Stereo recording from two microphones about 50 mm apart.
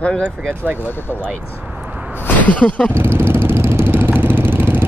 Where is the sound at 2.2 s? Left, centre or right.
Left.